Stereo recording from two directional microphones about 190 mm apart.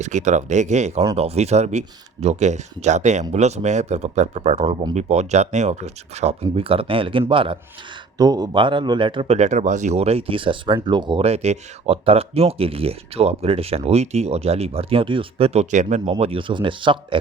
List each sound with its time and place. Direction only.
0.0 s speech: 35° right (ahead or behind)